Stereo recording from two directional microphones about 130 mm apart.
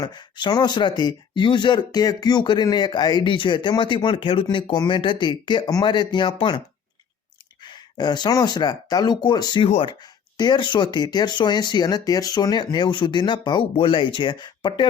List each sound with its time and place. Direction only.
0.0 s speech: 35° left (ahead or behind)
7.6 s speech: 35° left (ahead or behind)
9.6 s speech: 45° left (ahead or behind)
10.0 s speech: 35° left (ahead or behind)